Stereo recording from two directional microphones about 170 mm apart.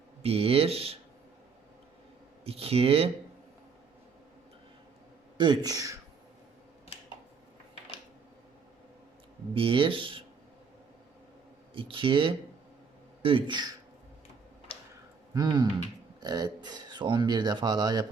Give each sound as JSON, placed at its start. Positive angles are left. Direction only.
{"t": 0.2, "sound": "speech", "side_deg": -35}
{"t": 2.4, "sound": "speech", "side_deg": -35}
{"t": 5.4, "sound": "speech", "side_deg": -25}
{"t": 9.6, "sound": "speech", "side_deg": -30}
{"t": 11.7, "sound": "speech", "side_deg": -30}
{"t": 14.7, "sound": "tick-tock", "side_deg": 35}
{"t": 15.3, "sound": "speech", "side_deg": -25}